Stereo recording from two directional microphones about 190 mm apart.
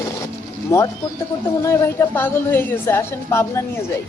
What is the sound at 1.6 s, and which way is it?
Speech, 15° left (ahead or behind).